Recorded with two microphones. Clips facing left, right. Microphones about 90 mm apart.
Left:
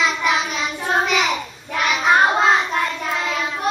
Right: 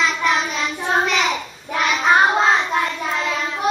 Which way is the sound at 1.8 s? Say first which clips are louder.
Even; centre (ahead or behind).